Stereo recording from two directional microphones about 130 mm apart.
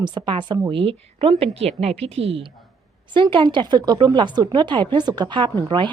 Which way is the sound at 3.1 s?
40° right (ahead or behind).